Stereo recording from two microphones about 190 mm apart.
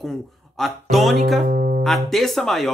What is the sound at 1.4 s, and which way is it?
Speech, 45° right (ahead or behind).